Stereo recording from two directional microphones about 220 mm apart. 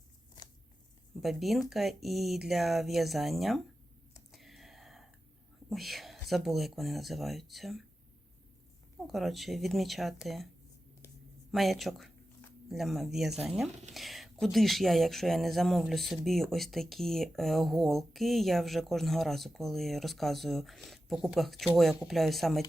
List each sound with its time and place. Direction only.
0.4 s a sound: 20° left (ahead or behind)
1.2 s speech: centre (ahead or behind)
4.3 s whispering: centre (ahead or behind)
5.7 s speech: centre (ahead or behind)
9.0 s speech: centre (ahead or behind)
11.5 s a sound: centre (ahead or behind)
13.1 s speech: centre (ahead or behind)